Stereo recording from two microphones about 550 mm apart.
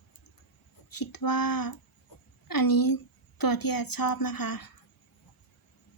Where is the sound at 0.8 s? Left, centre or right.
Left.